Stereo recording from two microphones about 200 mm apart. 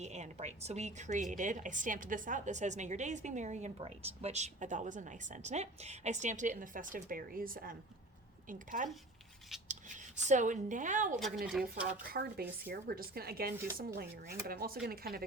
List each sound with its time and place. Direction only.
0.0 s a woman's voice: 35° right (ahead or behind)
11.6 s stir: 5° right (ahead or behind)
12.1 s a woman's voice: 50° right (ahead or behind)